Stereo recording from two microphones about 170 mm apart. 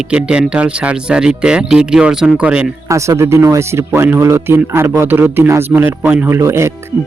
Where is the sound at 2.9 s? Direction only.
15° right (ahead or behind).